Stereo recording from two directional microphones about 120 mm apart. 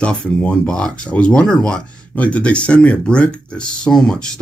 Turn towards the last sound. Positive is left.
turn(degrees=5)  # may be behind; listen again after turning